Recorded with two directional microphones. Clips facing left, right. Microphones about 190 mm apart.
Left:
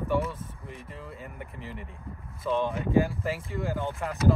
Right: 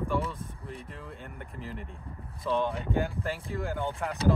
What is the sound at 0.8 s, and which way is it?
Speech, 5° left (ahead or behind).